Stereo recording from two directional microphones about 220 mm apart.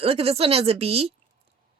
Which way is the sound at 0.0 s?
25° right (ahead or behind).